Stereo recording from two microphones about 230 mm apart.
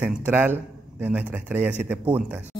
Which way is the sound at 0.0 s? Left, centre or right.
Centre.